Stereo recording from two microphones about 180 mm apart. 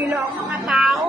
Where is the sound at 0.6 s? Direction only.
Centre (ahead or behind).